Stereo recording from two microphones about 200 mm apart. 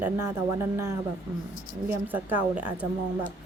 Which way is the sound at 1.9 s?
10° right (ahead or behind).